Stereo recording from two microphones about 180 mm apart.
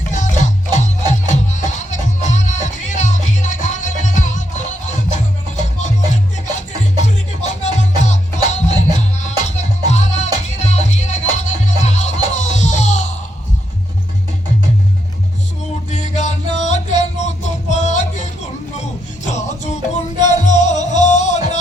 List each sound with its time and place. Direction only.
0.1 s music: 40° left (ahead or behind)
6.6 s music: 40° left (ahead or behind)
15.9 s music: 40° left (ahead or behind)
19.3 s music: 40° left (ahead or behind)